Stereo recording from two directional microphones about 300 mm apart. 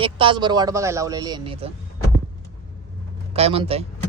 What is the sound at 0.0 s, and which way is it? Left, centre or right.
A man's voice, centre.